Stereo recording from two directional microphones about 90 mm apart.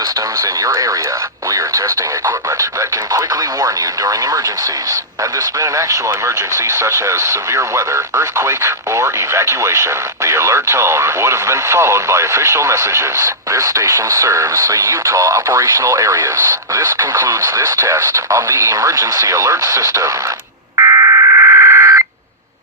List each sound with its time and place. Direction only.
0.4 s radio: 40° right (ahead or behind)
1.5 s speech: 35° right (ahead or behind)
5.5 s speech: 35° right (ahead or behind)
20.7 s fire alarm: 35° right (ahead or behind)